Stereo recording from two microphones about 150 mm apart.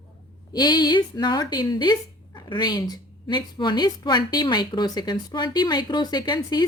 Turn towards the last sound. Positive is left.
turn(degrees=30)  # may be behind; listen again after turning